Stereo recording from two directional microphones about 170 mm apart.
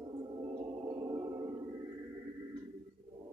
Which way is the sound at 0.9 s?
20° right (ahead or behind).